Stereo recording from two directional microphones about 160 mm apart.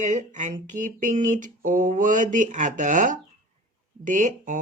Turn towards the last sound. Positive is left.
turn(degrees=-50)  # may be behind; listen again after turning